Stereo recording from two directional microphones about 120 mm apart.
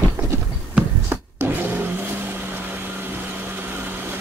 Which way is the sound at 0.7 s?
15° right (ahead or behind).